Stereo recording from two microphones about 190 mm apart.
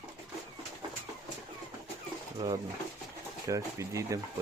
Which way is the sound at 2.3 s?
25° right (ahead or behind).